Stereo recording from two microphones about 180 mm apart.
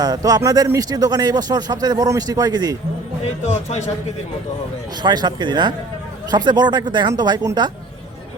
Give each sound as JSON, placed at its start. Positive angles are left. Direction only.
{"t": 0.0, "sound": "speech", "side_deg": -20}
{"t": 3.4, "sound": "a man's voice", "side_deg": 40}
{"t": 5.0, "sound": "speech", "side_deg": -25}